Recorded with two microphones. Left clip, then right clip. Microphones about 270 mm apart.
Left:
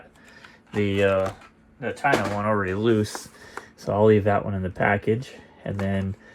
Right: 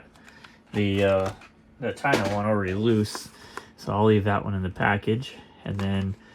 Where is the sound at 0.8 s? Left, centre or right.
Left.